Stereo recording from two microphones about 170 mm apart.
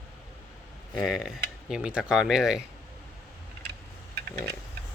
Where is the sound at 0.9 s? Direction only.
Centre (ahead or behind).